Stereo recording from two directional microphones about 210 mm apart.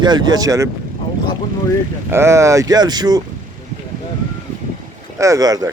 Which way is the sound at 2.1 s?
15° right (ahead or behind).